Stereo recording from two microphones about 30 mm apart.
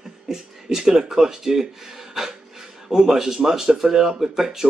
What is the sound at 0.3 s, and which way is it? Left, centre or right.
Speech, centre.